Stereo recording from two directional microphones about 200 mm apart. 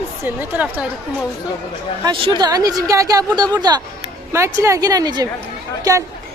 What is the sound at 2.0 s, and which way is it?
A woman's voice, 25° right (ahead or behind).